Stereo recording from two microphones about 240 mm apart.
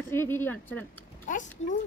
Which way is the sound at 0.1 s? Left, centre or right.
Centre.